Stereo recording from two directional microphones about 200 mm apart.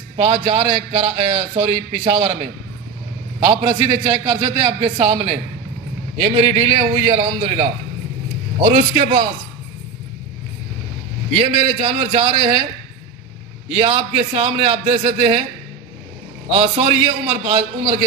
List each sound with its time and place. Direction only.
0.2 s a man's voice: 30° right (ahead or behind)
3.3 s a man's voice: 25° right (ahead or behind)
8.5 s a man's voice: 45° right (ahead or behind)
11.3 s a man's voice: 25° right (ahead or behind)
13.7 s a man's voice: 30° right (ahead or behind)
16.5 s a man's voice: 25° right (ahead or behind)